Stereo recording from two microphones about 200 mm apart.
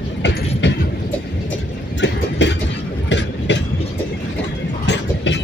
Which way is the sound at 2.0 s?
60° left (ahead or behind).